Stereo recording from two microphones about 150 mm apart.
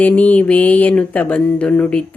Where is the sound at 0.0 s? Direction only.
10° left (ahead or behind).